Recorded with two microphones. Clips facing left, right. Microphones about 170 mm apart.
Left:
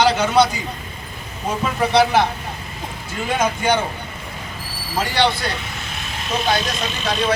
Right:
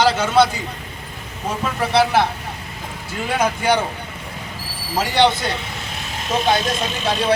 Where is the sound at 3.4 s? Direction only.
10° right (ahead or behind).